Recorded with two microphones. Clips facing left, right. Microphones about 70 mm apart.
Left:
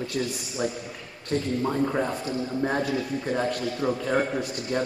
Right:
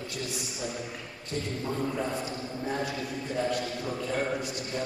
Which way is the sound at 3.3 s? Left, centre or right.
Left.